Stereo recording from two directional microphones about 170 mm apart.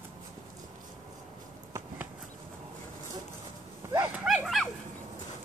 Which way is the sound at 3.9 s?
5° right (ahead or behind).